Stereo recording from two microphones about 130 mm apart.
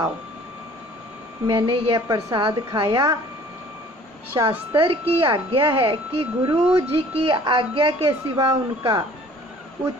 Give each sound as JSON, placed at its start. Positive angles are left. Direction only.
{"t": 1.5, "sound": "a woman's voice", "side_deg": -40}
{"t": 4.4, "sound": "a woman's voice", "side_deg": -30}
{"t": 4.7, "sound": "a woman's voice", "side_deg": -45}